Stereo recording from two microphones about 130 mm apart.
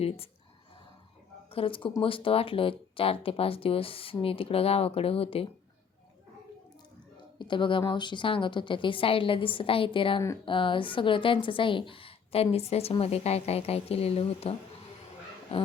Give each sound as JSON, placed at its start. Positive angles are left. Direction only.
{"t": 1.5, "sound": "a woman's voice", "side_deg": 45}
{"t": 7.3, "sound": "a woman's voice", "side_deg": 40}